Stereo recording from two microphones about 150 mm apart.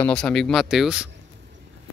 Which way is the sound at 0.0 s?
5° left (ahead or behind).